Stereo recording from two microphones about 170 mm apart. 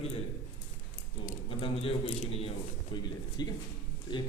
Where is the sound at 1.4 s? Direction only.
35° left (ahead or behind).